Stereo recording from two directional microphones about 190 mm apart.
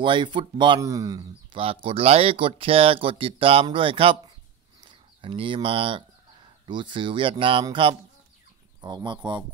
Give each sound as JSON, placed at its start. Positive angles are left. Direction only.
{"t": 0.0, "sound": "speech", "side_deg": -25}